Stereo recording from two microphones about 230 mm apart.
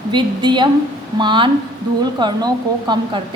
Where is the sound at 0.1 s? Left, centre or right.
Centre.